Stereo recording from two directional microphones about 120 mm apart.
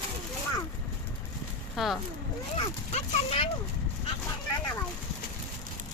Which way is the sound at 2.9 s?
55° left (ahead or behind).